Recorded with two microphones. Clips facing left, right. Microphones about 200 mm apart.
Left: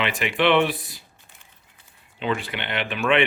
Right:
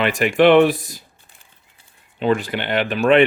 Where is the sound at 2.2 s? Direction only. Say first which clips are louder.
Right 7 dB; 40° right (ahead or behind).